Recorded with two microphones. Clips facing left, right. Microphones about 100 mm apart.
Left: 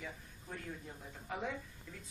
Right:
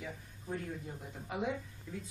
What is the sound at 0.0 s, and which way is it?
Speech, 15° right (ahead or behind).